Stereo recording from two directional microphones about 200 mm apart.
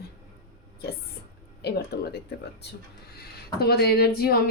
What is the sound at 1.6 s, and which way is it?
Speech, 55° left (ahead or behind).